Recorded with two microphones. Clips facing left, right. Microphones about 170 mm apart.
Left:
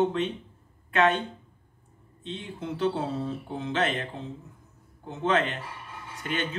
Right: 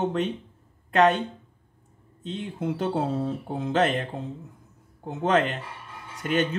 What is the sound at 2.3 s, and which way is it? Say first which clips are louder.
Speech: right 5 dB; 45° right (ahead or behind).